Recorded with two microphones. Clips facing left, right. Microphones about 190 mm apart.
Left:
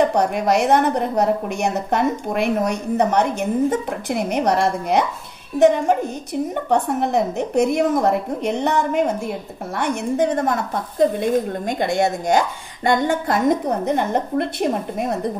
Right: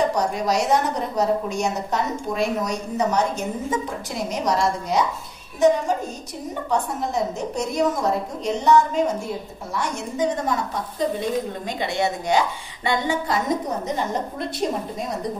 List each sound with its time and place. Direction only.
0.0 s a woman's voice: 60° left (ahead or behind)